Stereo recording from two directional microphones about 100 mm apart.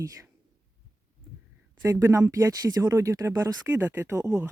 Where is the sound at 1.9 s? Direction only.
35° right (ahead or behind).